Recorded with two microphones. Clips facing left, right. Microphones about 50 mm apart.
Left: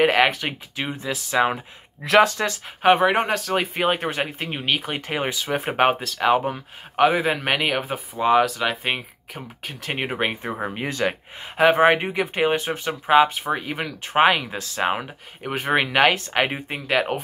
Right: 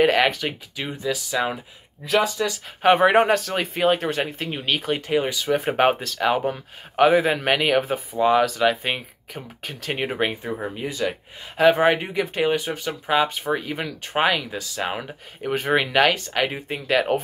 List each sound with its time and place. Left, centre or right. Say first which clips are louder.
0.0 s speech: even; centre; by 1.6 s left
2.0 s speech: left 5 dB; left
2.8 s speech: right 1 dB; centre
3.7 s speech: right 2 dB; centre
5.0 s speech: right 3 dB; left
5.3 s speech: right 3 dB; centre
10.4 s speech: left 1 dB; left
10.7 s speech: left 3 dB; left
11.5 s speech: left 1 dB; left
13.3 s speech: even; centre
14.1 s speech: left 4 dB; left
15.0 s speech: right 3 dB; centre